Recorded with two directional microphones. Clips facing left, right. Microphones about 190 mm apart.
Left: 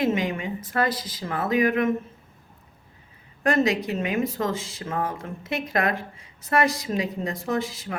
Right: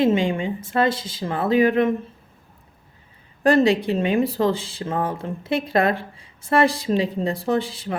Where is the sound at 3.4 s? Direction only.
30° right (ahead or behind).